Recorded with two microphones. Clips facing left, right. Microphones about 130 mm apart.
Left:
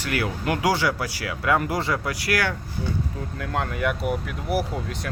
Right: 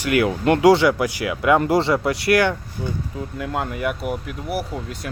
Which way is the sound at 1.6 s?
30° right (ahead or behind).